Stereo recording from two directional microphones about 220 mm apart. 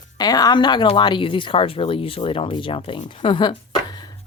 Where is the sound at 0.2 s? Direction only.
15° left (ahead or behind).